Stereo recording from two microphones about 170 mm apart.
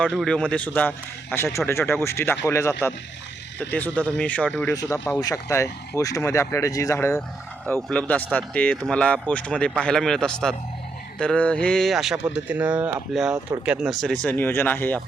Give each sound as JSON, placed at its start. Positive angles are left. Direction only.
{"t": 0.0, "sound": "speech", "side_deg": 5}